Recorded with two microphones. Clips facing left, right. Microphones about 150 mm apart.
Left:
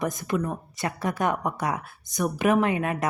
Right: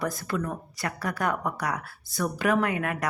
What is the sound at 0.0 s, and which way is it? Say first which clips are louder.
Speech: left 3 dB; 20° left (ahead or behind).